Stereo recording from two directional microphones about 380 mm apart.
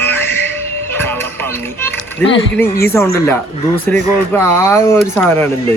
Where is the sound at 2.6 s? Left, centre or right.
Centre.